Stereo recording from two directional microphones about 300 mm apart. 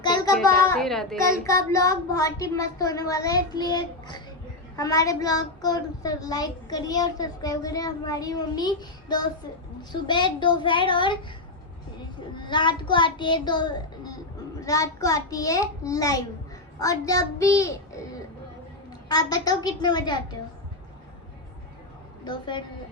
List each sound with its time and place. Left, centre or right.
0.0 s a sound: centre
0.3 s a child's voice: centre
12.4 s speech: centre
22.2 s speech: centre